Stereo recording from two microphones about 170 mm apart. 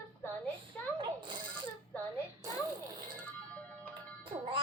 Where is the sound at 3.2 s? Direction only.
10° left (ahead or behind).